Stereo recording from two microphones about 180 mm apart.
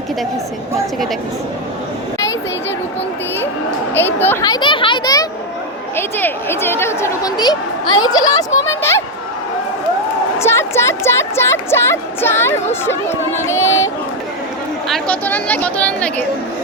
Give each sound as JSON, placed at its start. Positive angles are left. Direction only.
{"t": 3.9, "sound": "speech", "side_deg": 10}
{"t": 6.0, "sound": "speech", "side_deg": 10}
{"t": 10.4, "sound": "speech", "side_deg": 15}
{"t": 14.8, "sound": "speech", "side_deg": 5}